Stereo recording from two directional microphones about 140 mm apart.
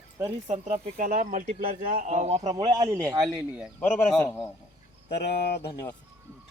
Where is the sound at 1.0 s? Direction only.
75° right (ahead or behind); by 2.4 s 55° right (ahead or behind).